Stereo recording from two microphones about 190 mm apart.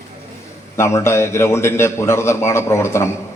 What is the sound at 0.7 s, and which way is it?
A man's voice, 15° left (ahead or behind).